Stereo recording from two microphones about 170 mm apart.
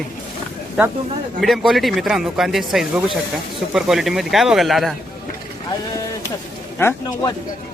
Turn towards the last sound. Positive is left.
turn(degrees=15)  # may be behind; listen again after turning